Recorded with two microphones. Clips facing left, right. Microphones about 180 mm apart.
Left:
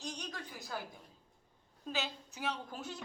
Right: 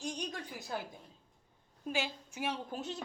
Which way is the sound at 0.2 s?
20° right (ahead or behind).